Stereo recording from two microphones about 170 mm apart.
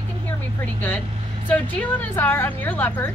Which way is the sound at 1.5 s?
10° left (ahead or behind).